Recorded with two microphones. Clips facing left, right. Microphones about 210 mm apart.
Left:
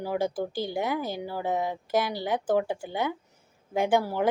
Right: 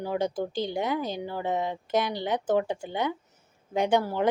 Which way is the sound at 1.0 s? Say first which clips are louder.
Right 1 dB; 20° right (ahead or behind).